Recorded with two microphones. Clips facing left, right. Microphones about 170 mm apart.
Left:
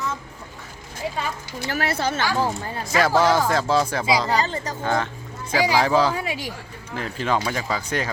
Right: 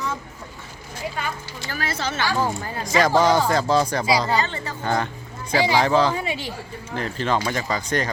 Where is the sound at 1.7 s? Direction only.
65° left (ahead or behind).